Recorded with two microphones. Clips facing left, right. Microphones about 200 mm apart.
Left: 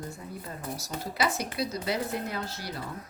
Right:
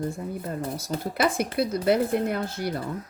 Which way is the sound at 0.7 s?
55° right (ahead or behind).